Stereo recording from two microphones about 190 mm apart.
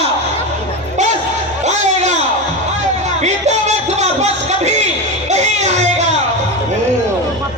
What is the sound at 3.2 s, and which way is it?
Music, 35° right (ahead or behind).